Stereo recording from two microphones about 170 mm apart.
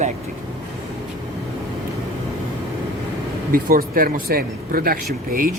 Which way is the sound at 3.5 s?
60° right (ahead or behind).